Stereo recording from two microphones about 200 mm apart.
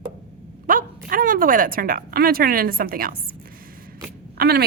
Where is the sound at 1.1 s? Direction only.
45° right (ahead or behind).